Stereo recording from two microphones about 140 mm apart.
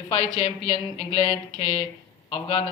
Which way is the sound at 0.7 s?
40° left (ahead or behind).